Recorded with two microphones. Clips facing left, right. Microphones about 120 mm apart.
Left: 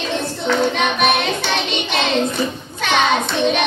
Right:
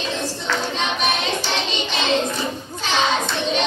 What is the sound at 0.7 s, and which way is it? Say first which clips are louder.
Child singing: left 5 dB; 65° left (ahead or behind).